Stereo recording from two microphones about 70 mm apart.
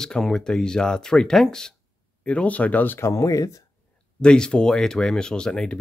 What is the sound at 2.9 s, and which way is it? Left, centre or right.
Speech, left.